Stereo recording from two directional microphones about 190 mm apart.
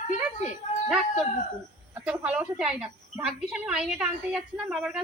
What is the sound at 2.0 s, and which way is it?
A woman's voice, 5° right (ahead or behind).